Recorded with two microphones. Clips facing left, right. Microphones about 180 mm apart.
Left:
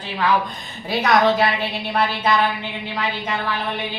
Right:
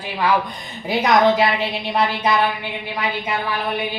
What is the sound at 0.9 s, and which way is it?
A woman's voice, 20° right (ahead or behind).